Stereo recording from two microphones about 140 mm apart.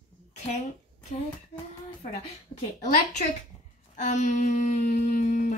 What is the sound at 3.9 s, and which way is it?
Speech, 60° left (ahead or behind).